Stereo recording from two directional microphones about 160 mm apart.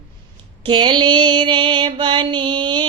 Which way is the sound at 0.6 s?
30° right (ahead or behind).